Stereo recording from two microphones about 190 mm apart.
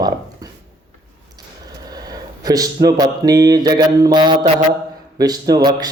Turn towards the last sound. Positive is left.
turn(degrees=-20)  # may be behind; listen again after turning